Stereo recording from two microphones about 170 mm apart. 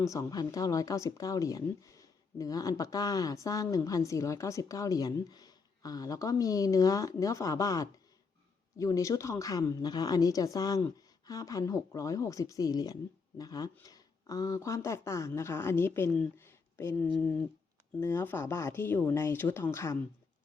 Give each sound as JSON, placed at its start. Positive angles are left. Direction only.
{"t": 0.0, "sound": "speech", "side_deg": 20}